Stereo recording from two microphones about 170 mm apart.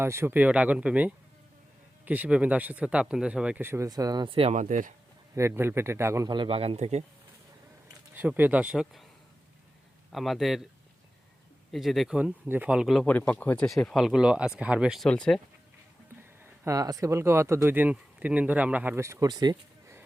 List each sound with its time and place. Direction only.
0.0 s speech: 15° right (ahead or behind); by 4.9 s 50° right (ahead or behind)
5.3 s speech: 15° right (ahead or behind); by 7.0 s 40° right (ahead or behind)
8.1 s speech: 10° right (ahead or behind)
10.1 s speech: centre (ahead or behind)
11.7 s speech: centre (ahead or behind)
16.4 s speech: 20° right (ahead or behind)